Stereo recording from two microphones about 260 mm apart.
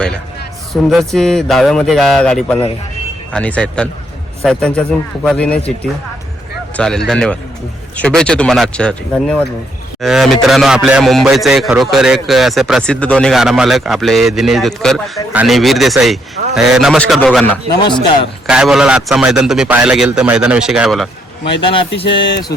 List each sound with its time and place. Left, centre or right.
0.7 s a man's voice: centre
6.7 s a man's voice: centre
21.6 s speech: centre
22.0 s speech: left